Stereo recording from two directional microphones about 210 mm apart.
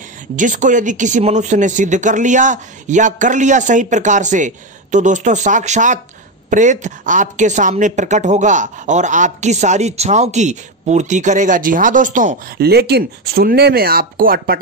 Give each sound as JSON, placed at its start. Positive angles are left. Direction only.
{"t": 0.4, "sound": "a woman's voice", "side_deg": -35}